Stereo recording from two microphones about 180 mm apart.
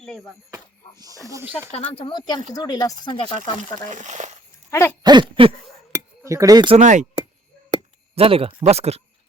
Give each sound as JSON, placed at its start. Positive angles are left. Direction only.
{"t": 0.0, "sound": "speech", "side_deg": 5}
{"t": 0.5, "sound": "music", "side_deg": -20}
{"t": 1.3, "sound": "speech", "side_deg": -10}
{"t": 1.7, "sound": "speech", "side_deg": 30}
{"t": 3.8, "sound": "speech", "side_deg": -40}
{"t": 4.7, "sound": "a sound", "side_deg": 15}
{"t": 5.0, "sound": "a sound", "side_deg": -25}
{"t": 6.2, "sound": "a sound", "side_deg": -20}
{"t": 6.7, "sound": "speech", "side_deg": -40}
{"t": 7.7, "sound": "chop", "side_deg": -35}